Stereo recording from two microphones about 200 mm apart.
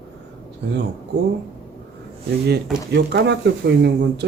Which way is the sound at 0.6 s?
65° right (ahead or behind).